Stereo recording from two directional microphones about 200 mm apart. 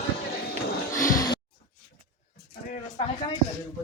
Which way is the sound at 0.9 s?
20° left (ahead or behind).